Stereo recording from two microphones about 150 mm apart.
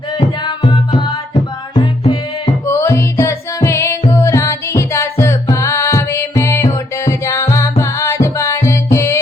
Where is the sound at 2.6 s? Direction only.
15° left (ahead or behind).